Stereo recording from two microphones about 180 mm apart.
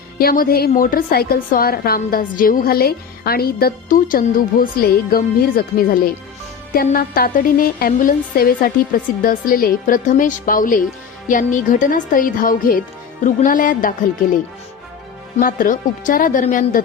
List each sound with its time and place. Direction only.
0.2 s a woman's voice: 55° left (ahead or behind)
15.4 s a woman's voice: 50° left (ahead or behind)